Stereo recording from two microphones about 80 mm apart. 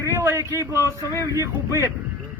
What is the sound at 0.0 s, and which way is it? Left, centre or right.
A man's voice, right.